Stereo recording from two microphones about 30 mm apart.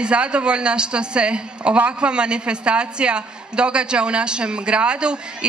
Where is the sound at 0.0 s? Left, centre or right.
Right.